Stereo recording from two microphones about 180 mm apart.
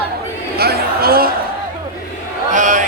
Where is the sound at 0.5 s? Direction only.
60° right (ahead or behind).